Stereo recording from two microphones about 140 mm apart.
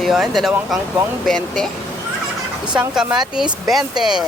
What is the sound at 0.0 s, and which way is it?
Speech, centre (ahead or behind).